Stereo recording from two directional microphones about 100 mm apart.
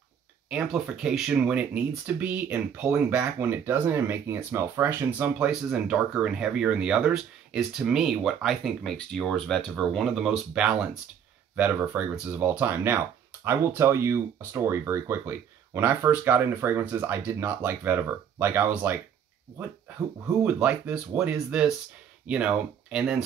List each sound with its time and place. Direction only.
0.5 s speech: 5° right (ahead or behind)
5.5 s speech: 5° right (ahead or behind)
20.6 s speech: 10° right (ahead or behind)